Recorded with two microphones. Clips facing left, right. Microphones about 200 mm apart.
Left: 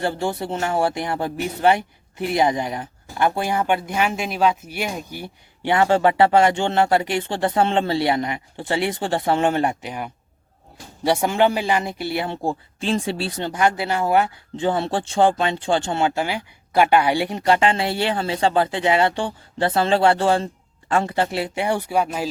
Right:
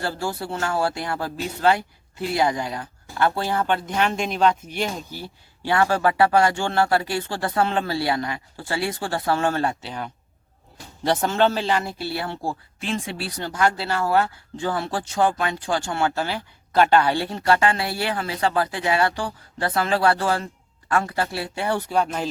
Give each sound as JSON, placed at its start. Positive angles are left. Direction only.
{"t": 0.0, "sound": "speech", "side_deg": 20}